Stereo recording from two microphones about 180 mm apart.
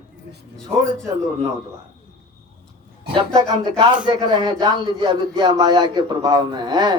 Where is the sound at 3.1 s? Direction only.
20° right (ahead or behind).